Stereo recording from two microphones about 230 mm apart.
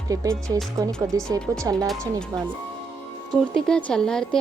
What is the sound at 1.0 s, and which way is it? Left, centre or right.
Speech, centre.